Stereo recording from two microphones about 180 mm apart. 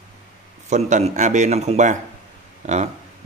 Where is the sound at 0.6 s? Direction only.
40° right (ahead or behind).